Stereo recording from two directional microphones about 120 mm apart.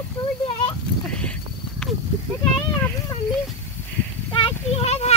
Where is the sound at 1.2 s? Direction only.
10° left (ahead or behind).